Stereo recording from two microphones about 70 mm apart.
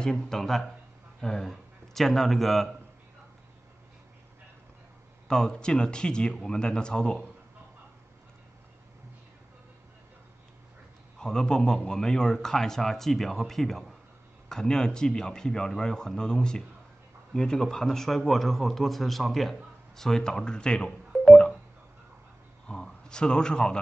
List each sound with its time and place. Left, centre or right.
0.0 s a man's voice: centre
5.3 s a man's voice: centre
11.1 s a man's voice: centre
21.1 s music: centre
22.7 s a man's voice: centre